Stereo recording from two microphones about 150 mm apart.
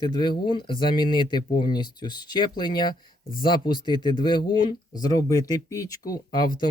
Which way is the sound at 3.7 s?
30° left (ahead or behind).